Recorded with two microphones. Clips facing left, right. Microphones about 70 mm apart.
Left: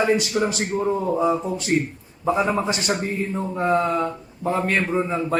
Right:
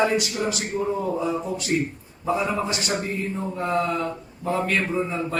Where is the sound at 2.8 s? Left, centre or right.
Left.